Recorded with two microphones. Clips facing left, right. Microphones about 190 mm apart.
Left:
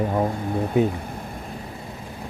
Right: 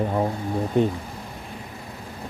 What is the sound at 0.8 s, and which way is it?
Speech, 5° left (ahead or behind).